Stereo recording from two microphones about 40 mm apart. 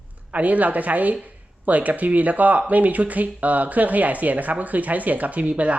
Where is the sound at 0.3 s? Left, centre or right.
Right.